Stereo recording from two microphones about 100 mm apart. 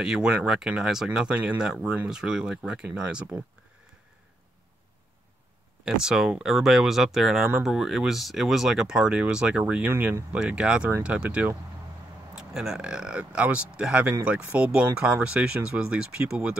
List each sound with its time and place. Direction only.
0.0 s speech: 5° right (ahead or behind)
2.0 s speech: 5° right (ahead or behind)
5.9 s speech: 10° right (ahead or behind)